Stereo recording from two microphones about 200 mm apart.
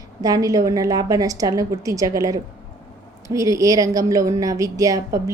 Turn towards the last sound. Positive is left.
turn(degrees=-15)  # may be behind; listen again after turning